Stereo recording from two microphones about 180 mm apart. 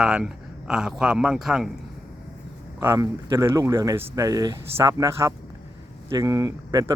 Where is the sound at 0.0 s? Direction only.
5° right (ahead or behind).